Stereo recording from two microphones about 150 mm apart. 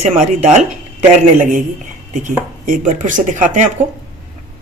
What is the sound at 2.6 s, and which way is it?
A woman's voice, 60° right (ahead or behind).